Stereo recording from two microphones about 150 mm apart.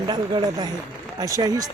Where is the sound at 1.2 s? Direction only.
25° right (ahead or behind).